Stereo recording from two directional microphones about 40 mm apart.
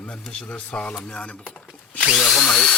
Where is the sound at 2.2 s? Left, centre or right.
Centre.